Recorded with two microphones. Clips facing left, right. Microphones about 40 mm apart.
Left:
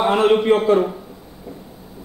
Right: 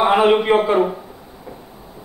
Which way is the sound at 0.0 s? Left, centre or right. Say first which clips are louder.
Right 1 dB; centre.